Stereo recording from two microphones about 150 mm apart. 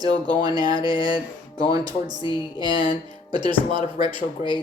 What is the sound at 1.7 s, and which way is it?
Speech, 25° right (ahead or behind).